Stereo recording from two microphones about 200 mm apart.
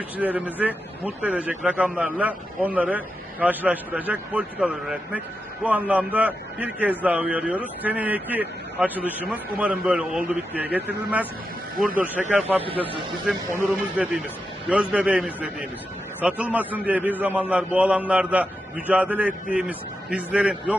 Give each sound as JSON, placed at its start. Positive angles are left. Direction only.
{"t": 0.2, "sound": "a man's voice", "side_deg": -10}
{"t": 12.3, "sound": "a man's voice", "side_deg": -10}
{"t": 12.6, "sound": "speech", "side_deg": -25}
{"t": 13.2, "sound": "a man's voice", "side_deg": -10}